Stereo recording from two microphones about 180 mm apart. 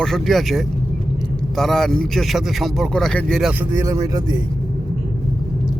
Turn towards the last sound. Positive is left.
turn(degrees=-20)  # may be behind; listen again after turning